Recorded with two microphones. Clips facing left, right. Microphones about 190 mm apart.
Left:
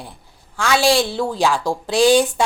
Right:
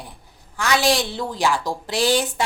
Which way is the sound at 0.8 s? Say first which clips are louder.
Left 6 dB; 10° left (ahead or behind).